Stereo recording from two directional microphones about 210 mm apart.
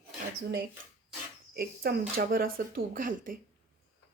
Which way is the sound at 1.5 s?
45° right (ahead or behind).